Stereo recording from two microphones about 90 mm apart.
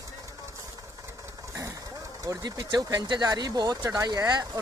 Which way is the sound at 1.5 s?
35° right (ahead or behind).